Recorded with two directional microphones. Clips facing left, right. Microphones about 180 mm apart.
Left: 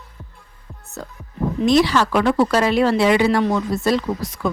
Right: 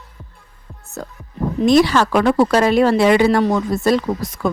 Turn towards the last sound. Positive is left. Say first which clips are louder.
# right 2 dB
turn(degrees=-50)  # may be behind; listen again after turning